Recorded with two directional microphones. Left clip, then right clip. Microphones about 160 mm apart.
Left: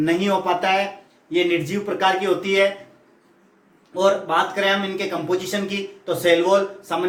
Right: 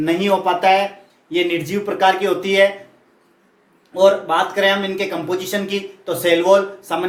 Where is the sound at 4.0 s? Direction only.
35° right (ahead or behind).